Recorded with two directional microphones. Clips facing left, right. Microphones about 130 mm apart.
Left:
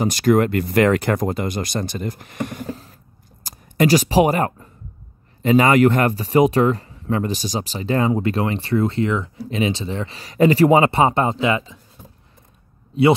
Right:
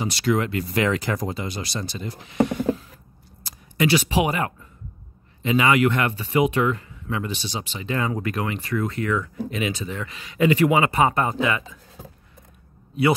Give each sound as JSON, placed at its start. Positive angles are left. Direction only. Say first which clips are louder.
{"t": 0.0, "sound": "speech", "louder": "left 6 dB", "side_deg": 50}
{"t": 13.0, "sound": "speech", "louder": "left 5 dB", "side_deg": 25}